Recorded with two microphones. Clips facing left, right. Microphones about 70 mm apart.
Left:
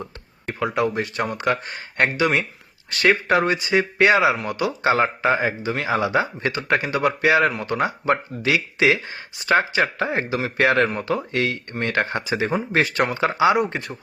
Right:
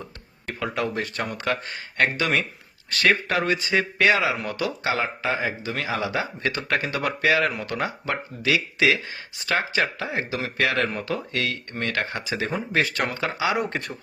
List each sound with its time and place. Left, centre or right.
0.8 s speech: left
13.6 s speech: centre